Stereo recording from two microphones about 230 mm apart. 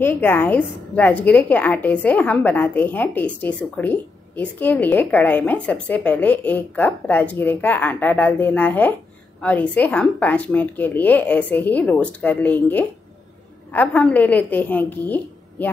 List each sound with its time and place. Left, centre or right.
0.0 s a woman's voice: centre